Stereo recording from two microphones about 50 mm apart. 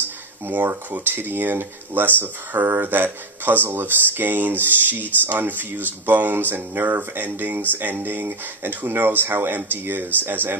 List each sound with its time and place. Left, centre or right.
0.5 s speech: right